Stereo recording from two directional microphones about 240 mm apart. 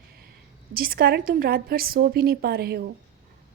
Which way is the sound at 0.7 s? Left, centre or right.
Right.